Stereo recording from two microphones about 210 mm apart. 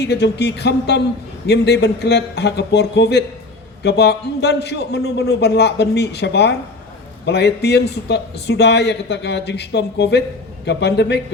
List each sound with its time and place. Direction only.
0.0 s a man's voice: 55° left (ahead or behind)